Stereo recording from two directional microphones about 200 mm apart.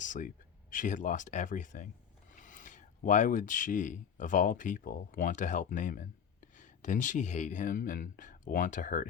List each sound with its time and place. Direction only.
0.0 s speech: 40° left (ahead or behind)